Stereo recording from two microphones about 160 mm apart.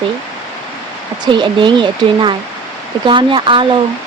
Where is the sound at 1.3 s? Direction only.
30° right (ahead or behind).